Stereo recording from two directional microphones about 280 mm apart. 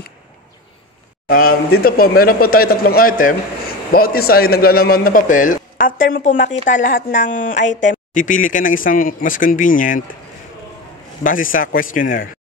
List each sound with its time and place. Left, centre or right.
1.3 s speech: left
11.2 s speech: left